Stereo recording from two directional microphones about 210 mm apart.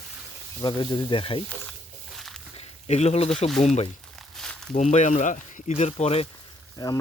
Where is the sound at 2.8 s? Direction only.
30° left (ahead or behind).